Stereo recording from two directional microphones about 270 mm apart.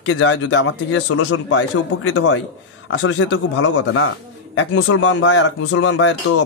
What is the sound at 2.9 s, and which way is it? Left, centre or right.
Speech, left.